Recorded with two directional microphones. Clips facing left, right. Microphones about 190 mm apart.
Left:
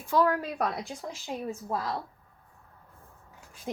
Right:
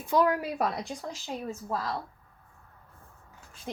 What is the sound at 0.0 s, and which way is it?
Speech, 15° right (ahead or behind).